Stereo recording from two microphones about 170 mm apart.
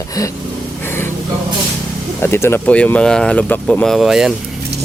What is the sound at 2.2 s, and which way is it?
Speech, 15° left (ahead or behind).